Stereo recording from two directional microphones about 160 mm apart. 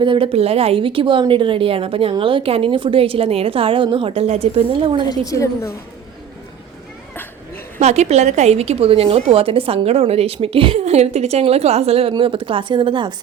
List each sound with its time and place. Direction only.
0.0 s a woman's voice: 35° right (ahead or behind)
5.0 s a woman's voice: 20° left (ahead or behind)
7.8 s a woman's voice: 45° right (ahead or behind); by 13.1 s 30° right (ahead or behind)